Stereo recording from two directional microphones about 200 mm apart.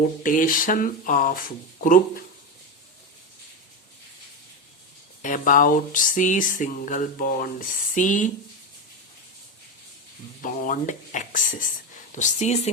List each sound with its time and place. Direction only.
0.2 s speech: 40° left (ahead or behind)
5.2 s speech: 40° left (ahead or behind)
10.4 s speech: 40° left (ahead or behind)